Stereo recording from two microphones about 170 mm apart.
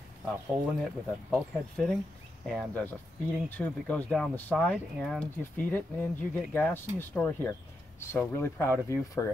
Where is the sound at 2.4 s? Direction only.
5° left (ahead or behind).